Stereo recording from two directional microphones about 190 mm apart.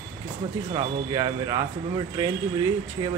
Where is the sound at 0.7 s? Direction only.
25° right (ahead or behind).